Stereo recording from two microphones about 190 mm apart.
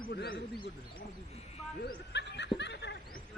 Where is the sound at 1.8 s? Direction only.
65° left (ahead or behind).